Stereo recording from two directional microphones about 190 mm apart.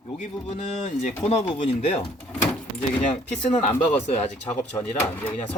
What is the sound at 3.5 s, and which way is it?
Speech, 35° left (ahead or behind).